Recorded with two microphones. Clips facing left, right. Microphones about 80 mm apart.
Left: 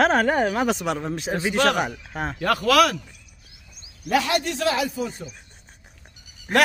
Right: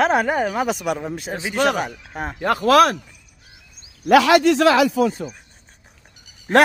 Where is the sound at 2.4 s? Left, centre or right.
Right.